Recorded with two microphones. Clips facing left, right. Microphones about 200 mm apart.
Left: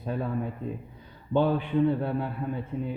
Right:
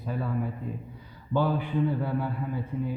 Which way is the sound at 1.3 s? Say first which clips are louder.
Left 2 dB; 25° left (ahead or behind).